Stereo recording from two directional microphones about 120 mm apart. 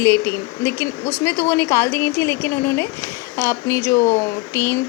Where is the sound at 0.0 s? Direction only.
25° left (ahead or behind).